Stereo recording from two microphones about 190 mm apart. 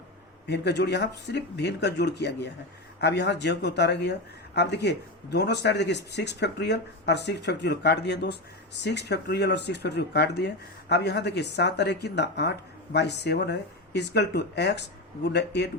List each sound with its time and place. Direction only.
0.4 s speech: 60° left (ahead or behind)